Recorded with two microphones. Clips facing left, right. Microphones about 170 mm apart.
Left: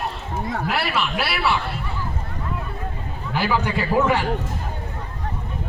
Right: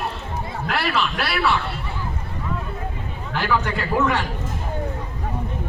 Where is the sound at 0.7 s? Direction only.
5° left (ahead or behind).